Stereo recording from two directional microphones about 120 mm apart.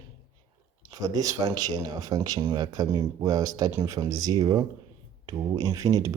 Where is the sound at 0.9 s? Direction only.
30° right (ahead or behind).